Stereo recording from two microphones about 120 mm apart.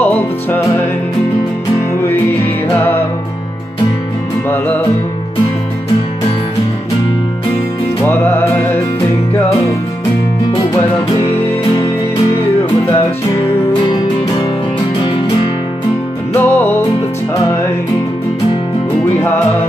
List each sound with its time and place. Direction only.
2.0 s music: 15° left (ahead or behind)
16.3 s music: 20° left (ahead or behind)